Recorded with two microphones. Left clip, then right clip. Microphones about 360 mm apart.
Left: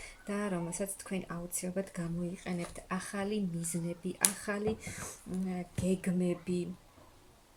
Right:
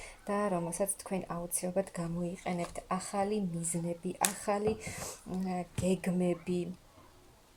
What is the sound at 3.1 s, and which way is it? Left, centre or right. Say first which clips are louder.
Speech: right 4 dB; right.